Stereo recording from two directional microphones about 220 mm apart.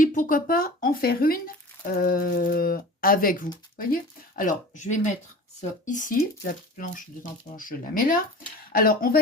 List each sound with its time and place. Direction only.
0.0 s speech: 35° left (ahead or behind)